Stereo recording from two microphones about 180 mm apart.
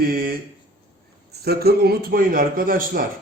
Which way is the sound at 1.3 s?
60° right (ahead or behind).